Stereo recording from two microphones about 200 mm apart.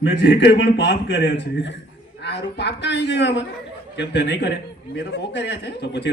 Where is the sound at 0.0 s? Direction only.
60° left (ahead or behind).